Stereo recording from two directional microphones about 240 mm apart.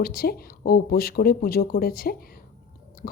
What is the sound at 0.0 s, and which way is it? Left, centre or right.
Speech, left.